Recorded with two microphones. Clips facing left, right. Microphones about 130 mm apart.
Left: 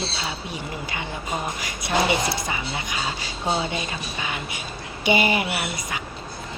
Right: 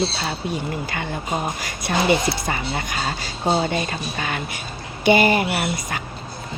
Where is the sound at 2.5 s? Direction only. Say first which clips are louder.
Right 4 dB; 50° right (ahead or behind).